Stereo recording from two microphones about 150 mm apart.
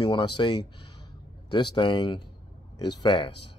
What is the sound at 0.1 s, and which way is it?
Speech, 30° left (ahead or behind).